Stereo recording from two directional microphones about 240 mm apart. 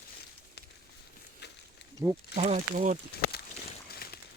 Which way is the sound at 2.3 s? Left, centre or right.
Right.